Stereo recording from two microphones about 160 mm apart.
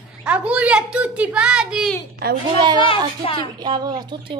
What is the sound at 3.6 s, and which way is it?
Speech, 25° right (ahead or behind).